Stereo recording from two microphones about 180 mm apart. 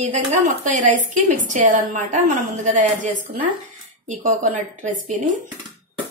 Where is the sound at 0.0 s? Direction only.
45° right (ahead or behind).